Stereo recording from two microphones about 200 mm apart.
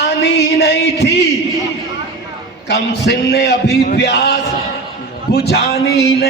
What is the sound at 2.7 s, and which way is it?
A man's voice, 55° left (ahead or behind).